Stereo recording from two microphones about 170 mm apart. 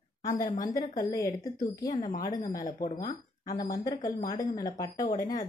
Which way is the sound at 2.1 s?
50° left (ahead or behind).